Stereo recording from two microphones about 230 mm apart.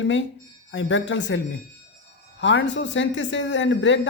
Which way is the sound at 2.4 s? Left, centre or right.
Left.